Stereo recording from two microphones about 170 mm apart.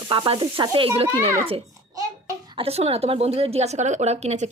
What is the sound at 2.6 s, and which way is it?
A woman's voice, 35° right (ahead or behind).